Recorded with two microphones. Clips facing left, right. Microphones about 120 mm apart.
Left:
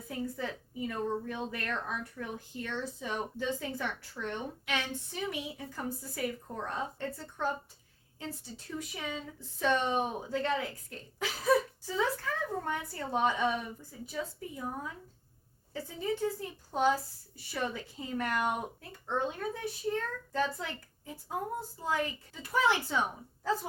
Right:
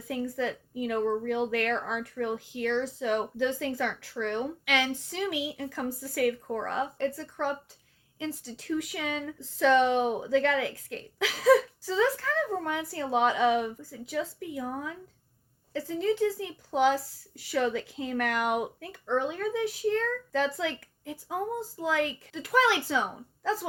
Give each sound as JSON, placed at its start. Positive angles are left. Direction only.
{"t": 0.1, "sound": "a woman's voice", "side_deg": -80}
{"t": 15.7, "sound": "speech", "side_deg": -85}